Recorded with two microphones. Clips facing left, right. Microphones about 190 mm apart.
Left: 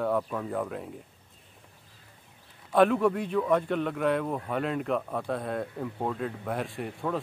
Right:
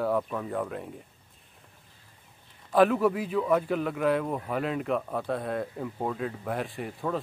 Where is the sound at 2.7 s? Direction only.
Centre (ahead or behind).